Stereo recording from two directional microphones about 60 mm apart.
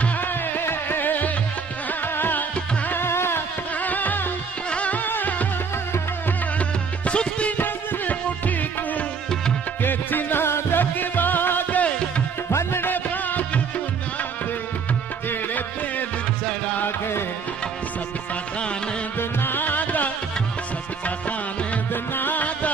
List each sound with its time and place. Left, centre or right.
0.2 s music: left
2.9 s music: left
3.7 s music: left
7.1 s music: centre
7.5 s music: left
12.4 s music: left
12.8 s music: left
15.2 s music: left
19.1 s music: left
21.9 s music: left